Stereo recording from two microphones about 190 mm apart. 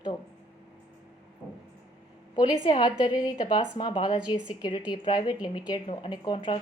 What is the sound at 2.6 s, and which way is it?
A woman's voice, 25° left (ahead or behind).